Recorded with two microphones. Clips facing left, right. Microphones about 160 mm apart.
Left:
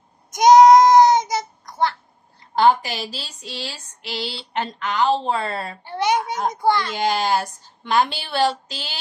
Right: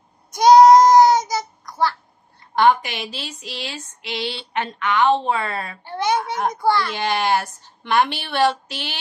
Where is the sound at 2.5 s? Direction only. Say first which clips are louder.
Even; 35° left (ahead or behind).